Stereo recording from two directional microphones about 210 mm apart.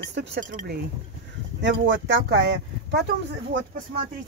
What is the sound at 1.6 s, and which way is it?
Speech, 60° right (ahead or behind).